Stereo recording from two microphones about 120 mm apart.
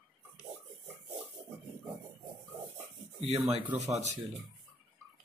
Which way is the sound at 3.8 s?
70° right (ahead or behind).